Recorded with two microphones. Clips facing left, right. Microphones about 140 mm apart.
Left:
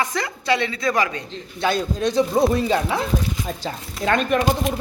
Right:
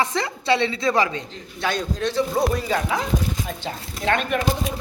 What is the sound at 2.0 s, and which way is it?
A woman's voice, 20° left (ahead or behind).